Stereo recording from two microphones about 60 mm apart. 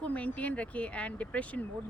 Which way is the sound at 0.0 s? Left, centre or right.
Left.